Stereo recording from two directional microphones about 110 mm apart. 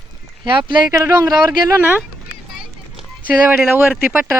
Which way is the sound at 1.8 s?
15° right (ahead or behind).